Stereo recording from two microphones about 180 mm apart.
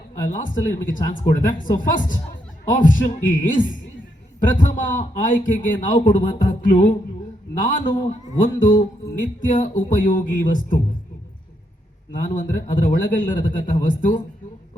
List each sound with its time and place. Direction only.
0.2 s speech: 45° left (ahead or behind)
7.9 s a man's voice: 25° left (ahead or behind)
8.4 s speech: 45° left (ahead or behind)
12.3 s speech: 45° left (ahead or behind)